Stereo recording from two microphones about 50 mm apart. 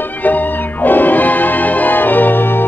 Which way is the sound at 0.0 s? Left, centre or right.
Left.